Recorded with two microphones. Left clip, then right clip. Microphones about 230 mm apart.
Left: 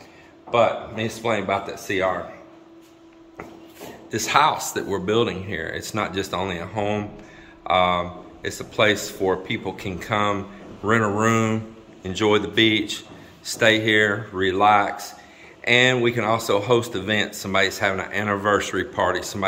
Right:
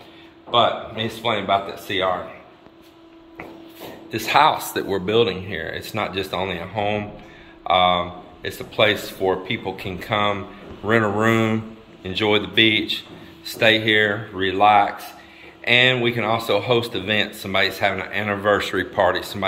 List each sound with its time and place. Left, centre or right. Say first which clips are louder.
0.5 s speech: right 1 dB; centre
4.1 s speech: right 2 dB; centre